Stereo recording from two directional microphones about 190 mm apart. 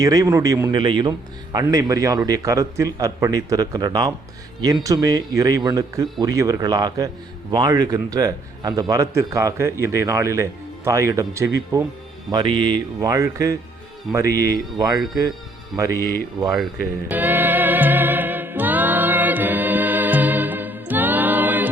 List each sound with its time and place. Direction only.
0.0 s a man's voice: 20° right (ahead or behind)
17.1 s music: 10° right (ahead or behind)